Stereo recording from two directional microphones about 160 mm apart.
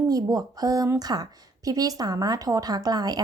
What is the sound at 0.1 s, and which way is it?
A woman's voice, 25° right (ahead or behind).